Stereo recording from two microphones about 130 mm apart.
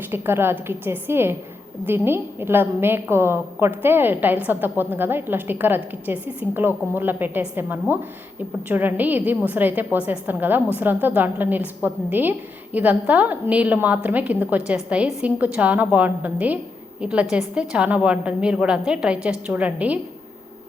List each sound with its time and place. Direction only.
0.1 s a woman's voice: 15° right (ahead or behind)